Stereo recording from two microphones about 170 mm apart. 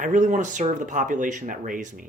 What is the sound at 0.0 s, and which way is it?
Speech, 50° right (ahead or behind).